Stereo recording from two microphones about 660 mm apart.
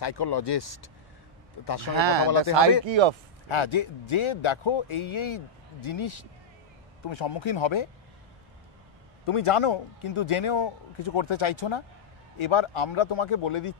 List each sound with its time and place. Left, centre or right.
0.0 s speech: left
1.9 s speech: right
2.2 s speech: left
2.8 s speech: right
3.4 s speech: left
9.2 s speech: left